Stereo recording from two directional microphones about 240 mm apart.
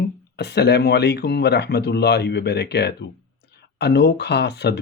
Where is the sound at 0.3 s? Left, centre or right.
Left.